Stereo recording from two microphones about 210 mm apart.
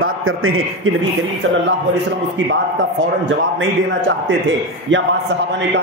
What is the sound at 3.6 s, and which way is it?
A man's voice, 60° right (ahead or behind).